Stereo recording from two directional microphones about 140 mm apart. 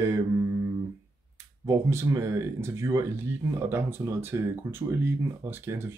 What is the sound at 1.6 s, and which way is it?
Speech, 20° right (ahead or behind).